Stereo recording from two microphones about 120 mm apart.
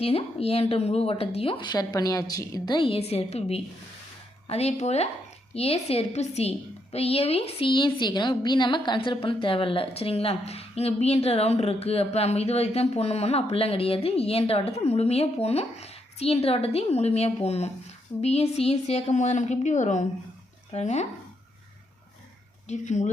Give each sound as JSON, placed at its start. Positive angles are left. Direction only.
{"t": 0.0, "sound": "speech", "side_deg": 55}
{"t": 2.7, "sound": "a woman's voice", "side_deg": 50}
{"t": 20.7, "sound": "a woman's voice", "side_deg": 70}
{"t": 22.7, "sound": "speech", "side_deg": 80}